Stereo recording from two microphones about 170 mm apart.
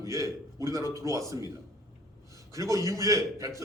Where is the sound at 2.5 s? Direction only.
20° right (ahead or behind).